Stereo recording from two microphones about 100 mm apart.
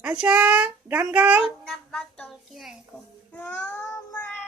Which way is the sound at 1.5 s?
Centre (ahead or behind).